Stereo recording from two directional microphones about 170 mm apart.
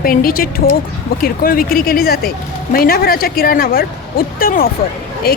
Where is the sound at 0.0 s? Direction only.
60° left (ahead or behind).